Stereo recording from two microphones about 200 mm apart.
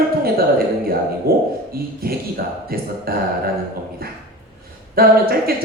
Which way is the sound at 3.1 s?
50° right (ahead or behind).